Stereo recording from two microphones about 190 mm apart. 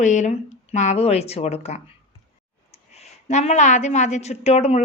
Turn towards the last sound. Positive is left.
turn(degrees=35)  # may be behind; listen again after turning